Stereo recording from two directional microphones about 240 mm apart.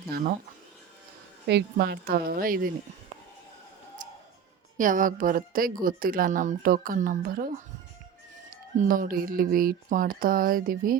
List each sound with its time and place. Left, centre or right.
0.1 s speech: right
1.5 s speech: right
4.8 s speech: right
8.8 s speech: right